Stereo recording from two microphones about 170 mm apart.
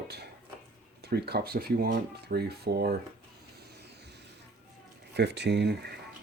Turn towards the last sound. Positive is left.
turn(degrees=-80)